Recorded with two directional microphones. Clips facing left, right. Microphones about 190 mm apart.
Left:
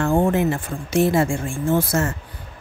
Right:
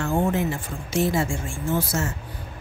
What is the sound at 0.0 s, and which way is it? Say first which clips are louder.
A woman's voice: left 5 dB; 55° left (ahead or behind).